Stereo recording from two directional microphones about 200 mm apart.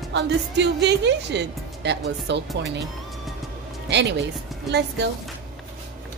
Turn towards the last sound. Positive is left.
turn(degrees=-60)  # may be behind; listen again after turning